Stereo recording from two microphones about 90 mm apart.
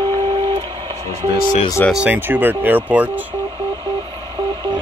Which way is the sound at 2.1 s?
20° right (ahead or behind).